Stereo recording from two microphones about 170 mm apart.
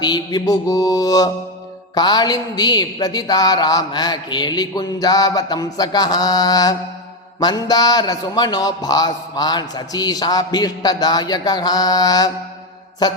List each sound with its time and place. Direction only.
0.0 s a man's voice: 25° left (ahead or behind)